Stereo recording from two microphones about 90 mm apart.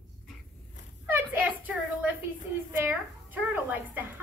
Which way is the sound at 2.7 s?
20° right (ahead or behind).